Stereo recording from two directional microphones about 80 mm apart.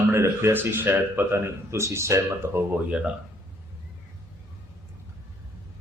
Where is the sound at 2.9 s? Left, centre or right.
Centre.